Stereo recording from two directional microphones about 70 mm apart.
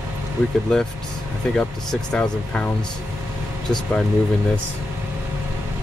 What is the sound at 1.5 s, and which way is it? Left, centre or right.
Speech, centre.